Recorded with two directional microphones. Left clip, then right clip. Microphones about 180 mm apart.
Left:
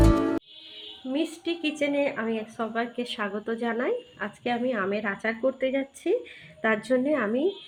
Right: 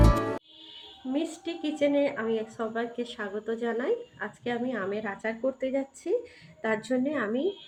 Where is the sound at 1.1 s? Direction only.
45° left (ahead or behind).